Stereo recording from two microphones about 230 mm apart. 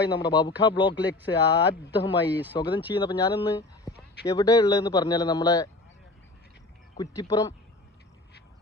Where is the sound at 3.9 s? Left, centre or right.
Centre.